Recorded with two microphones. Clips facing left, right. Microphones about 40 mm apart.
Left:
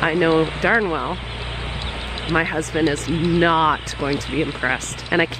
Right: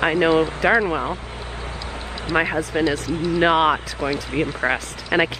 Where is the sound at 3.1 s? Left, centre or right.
Left.